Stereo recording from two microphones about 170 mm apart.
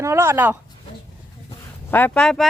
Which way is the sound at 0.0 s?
15° right (ahead or behind).